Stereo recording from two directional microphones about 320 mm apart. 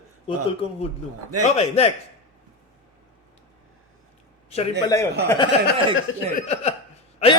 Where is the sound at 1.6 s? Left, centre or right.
Centre.